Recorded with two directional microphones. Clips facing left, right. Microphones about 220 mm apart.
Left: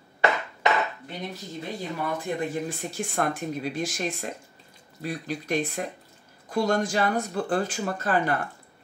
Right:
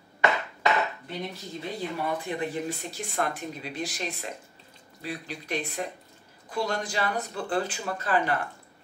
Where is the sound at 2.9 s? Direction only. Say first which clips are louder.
Left 5 dB; 45° left (ahead or behind).